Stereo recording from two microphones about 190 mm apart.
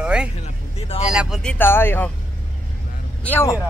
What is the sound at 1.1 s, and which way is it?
Speech, 5° right (ahead or behind).